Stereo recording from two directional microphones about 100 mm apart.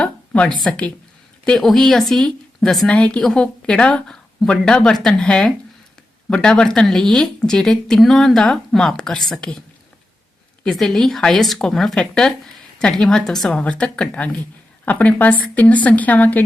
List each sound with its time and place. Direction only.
0.0 s a sound: 10° left (ahead or behind)
0.6 s a woman's voice: 10° left (ahead or behind)
10.6 s a woman's voice: 5° left (ahead or behind)